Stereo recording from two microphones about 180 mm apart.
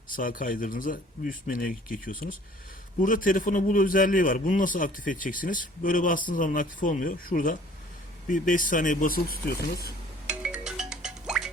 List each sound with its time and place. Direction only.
0.1 s a man's voice: 50° left (ahead or behind)
10.2 s music: 5° right (ahead or behind)